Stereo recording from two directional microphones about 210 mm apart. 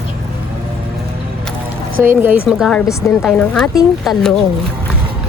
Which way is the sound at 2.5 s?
Centre (ahead or behind).